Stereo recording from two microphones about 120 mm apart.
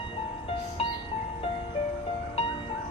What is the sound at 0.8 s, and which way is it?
Music, 55° left (ahead or behind).